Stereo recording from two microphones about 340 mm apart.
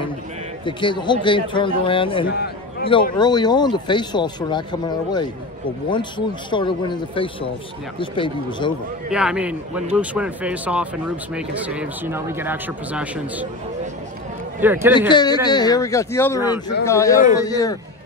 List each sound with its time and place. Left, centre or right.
0.7 s speech: centre
2.3 s a sound: left
2.9 s speech: centre
9.1 s speech: centre
14.6 s speech: centre
15.0 s speech: centre